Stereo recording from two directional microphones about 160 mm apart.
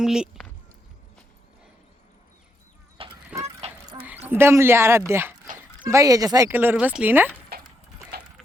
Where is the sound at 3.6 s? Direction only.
40° right (ahead or behind).